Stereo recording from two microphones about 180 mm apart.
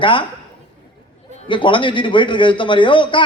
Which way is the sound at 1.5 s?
25° left (ahead or behind).